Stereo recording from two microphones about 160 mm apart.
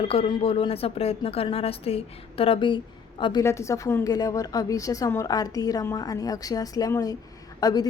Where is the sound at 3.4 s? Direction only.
20° left (ahead or behind).